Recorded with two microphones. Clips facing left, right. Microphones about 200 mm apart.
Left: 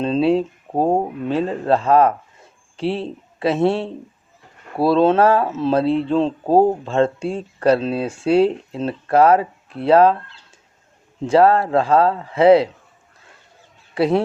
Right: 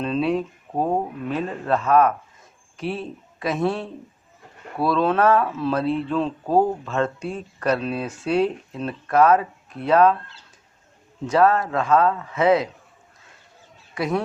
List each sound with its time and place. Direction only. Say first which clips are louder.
0.0 s speech: left 5 dB; 30° left (ahead or behind)
11.3 s speech: left 4 dB; 30° left (ahead or behind)
13.9 s speech: left 7 dB; 30° left (ahead or behind)